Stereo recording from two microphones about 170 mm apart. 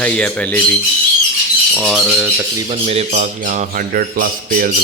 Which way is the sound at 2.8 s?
40° right (ahead or behind).